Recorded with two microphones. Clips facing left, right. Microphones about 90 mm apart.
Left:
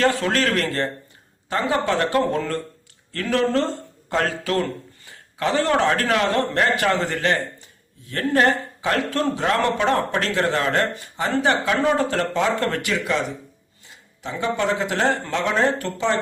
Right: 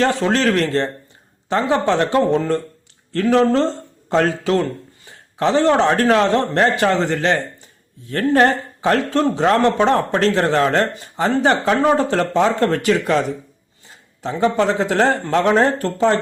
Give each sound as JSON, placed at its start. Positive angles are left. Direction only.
{"t": 0.0, "sound": "a man's voice", "side_deg": -25}
{"t": 14.2, "sound": "speech", "side_deg": -35}